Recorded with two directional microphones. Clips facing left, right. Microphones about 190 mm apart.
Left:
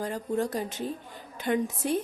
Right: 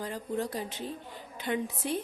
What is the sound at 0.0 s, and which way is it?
Speech, 45° left (ahead or behind).